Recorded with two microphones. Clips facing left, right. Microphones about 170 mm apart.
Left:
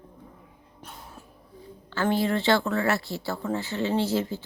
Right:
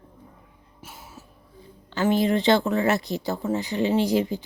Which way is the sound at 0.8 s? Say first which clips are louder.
Even; 5° right (ahead or behind).